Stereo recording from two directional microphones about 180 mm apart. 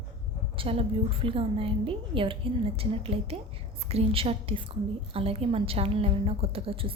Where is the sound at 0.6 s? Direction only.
30° right (ahead or behind).